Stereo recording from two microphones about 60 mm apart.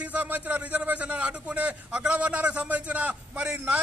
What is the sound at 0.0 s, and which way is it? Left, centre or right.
A man's voice, right.